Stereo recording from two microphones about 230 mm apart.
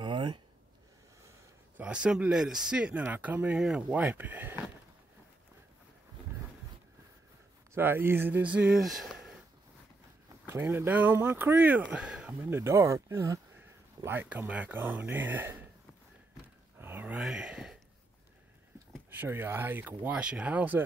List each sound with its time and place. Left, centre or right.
0.0 s a sound: centre
1.8 s speech: centre
7.7 s speech: centre
10.4 s speech: centre
16.7 s a sound: centre
19.0 s speech: centre